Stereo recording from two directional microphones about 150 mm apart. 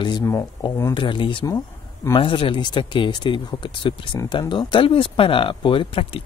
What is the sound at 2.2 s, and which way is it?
Speech, 35° left (ahead or behind).